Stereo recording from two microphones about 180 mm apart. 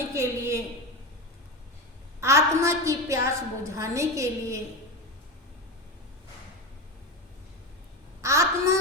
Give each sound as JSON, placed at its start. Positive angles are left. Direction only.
{"t": 0.1, "sound": "a woman's voice", "side_deg": -15}
{"t": 2.2, "sound": "a woman's voice", "side_deg": -15}
{"t": 8.2, "sound": "a woman's voice", "side_deg": -15}